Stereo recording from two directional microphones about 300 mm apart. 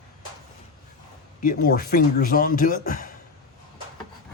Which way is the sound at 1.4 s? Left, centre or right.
Left.